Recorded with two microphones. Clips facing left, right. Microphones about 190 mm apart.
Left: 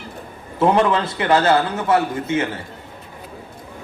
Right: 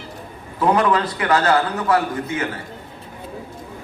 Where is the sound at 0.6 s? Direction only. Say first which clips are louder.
Left 1 dB; 25° left (ahead or behind).